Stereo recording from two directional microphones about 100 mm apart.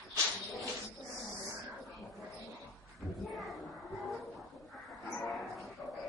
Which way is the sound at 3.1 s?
Centre (ahead or behind).